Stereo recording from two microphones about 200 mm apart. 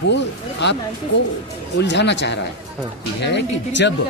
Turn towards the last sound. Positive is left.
turn(degrees=60)  # may be behind; listen again after turning